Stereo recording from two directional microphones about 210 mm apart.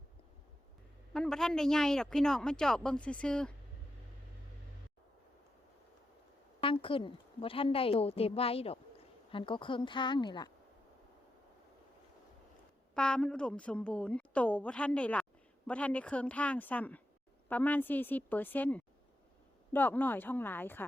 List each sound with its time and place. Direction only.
1.1 s a woman's voice: 5° left (ahead or behind)
6.8 s a woman's voice: 25° left (ahead or behind)
12.9 s a woman's voice: 5° left (ahead or behind)